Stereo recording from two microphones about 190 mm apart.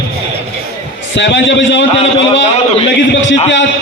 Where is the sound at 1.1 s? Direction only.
70° left (ahead or behind).